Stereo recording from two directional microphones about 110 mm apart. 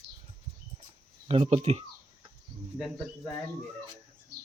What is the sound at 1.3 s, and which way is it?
Speech, 65° right (ahead or behind).